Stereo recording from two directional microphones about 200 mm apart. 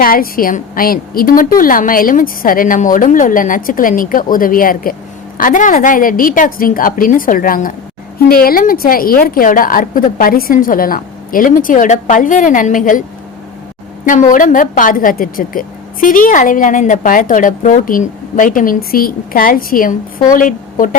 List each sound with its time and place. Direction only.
0.0 s a woman's voice: 45° left (ahead or behind)
14.0 s a woman's voice: 40° left (ahead or behind)